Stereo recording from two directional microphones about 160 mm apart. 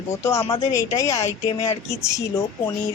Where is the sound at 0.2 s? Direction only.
15° left (ahead or behind).